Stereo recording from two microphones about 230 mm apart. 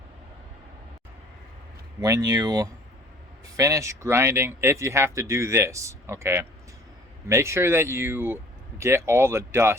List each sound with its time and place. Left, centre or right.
2.0 s speech: centre